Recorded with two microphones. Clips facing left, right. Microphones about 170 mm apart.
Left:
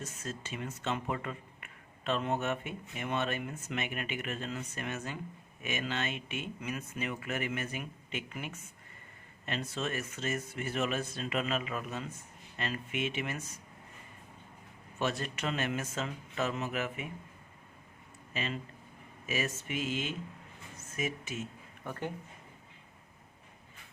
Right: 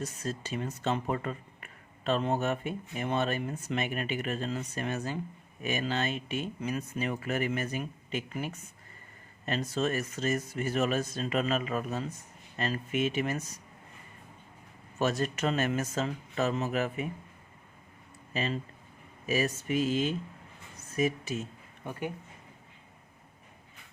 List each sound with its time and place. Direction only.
0.0 s speech: 35° right (ahead or behind)
14.9 s speech: 40° right (ahead or behind)
18.3 s speech: 35° right (ahead or behind)
21.8 s speech: 10° right (ahead or behind)